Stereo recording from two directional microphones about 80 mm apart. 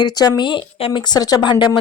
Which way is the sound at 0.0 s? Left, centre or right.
Left.